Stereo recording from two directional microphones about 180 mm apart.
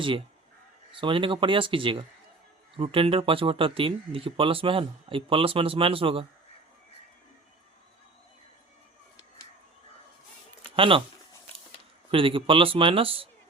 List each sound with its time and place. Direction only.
0.9 s speech: 30° right (ahead or behind)
10.8 s speech: 30° right (ahead or behind)
12.1 s speech: 30° right (ahead or behind)